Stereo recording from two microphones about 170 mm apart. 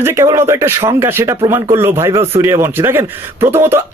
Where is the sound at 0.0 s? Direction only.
15° right (ahead or behind).